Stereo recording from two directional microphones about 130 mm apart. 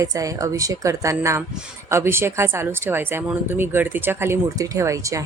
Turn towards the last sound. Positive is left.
turn(degrees=-25)  # may be behind; listen again after turning